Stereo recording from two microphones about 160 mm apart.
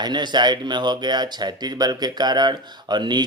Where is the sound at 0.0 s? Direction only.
25° right (ahead or behind).